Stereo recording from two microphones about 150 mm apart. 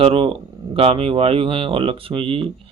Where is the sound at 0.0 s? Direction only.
35° right (ahead or behind).